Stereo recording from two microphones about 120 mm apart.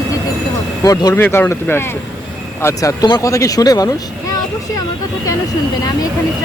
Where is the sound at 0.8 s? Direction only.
30° left (ahead or behind).